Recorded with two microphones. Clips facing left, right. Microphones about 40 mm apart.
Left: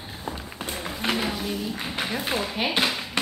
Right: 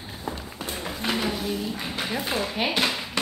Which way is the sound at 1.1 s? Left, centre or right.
Centre.